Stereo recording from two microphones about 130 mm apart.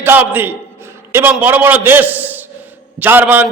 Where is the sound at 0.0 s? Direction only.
15° right (ahead or behind).